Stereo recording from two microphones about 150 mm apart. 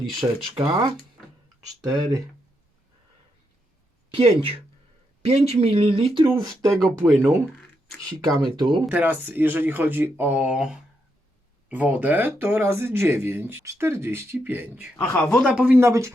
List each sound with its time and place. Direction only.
0.1 s speech: centre (ahead or behind)
0.6 s speech: 25° right (ahead or behind)
4.1 s speech: 40° right (ahead or behind)
6.7 s speech: 5° left (ahead or behind)
8.5 s speech: 30° right (ahead or behind)
8.9 s speech: 10° right (ahead or behind)
14.9 s speech: 15° left (ahead or behind)
15.4 s speech: 10° right (ahead or behind)